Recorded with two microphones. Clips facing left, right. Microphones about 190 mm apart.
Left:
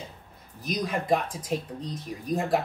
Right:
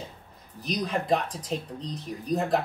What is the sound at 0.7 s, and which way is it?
Speech, 5° left (ahead or behind).